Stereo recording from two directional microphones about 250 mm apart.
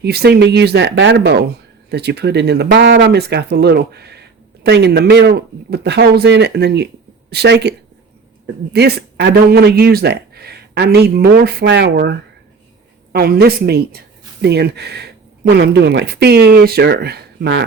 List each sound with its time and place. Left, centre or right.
0.0 s a woman's voice: right
8.7 s speech: right
13.1 s speech: right